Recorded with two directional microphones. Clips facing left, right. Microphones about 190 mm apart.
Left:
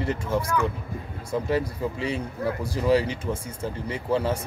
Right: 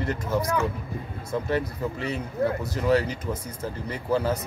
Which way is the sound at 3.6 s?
30° left (ahead or behind).